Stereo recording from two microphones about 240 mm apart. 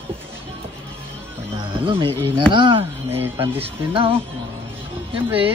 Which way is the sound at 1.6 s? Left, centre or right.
Centre.